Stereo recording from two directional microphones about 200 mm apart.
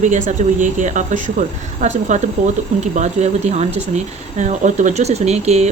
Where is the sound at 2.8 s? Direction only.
35° right (ahead or behind).